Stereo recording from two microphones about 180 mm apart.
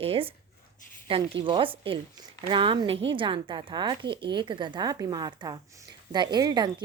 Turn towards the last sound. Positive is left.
turn(degrees=-25)  # may be behind; listen again after turning